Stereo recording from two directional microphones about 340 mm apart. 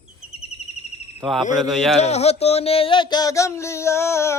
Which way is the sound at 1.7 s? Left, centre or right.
Centre.